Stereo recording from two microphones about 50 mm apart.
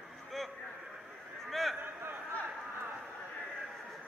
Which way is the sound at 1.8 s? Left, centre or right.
Right.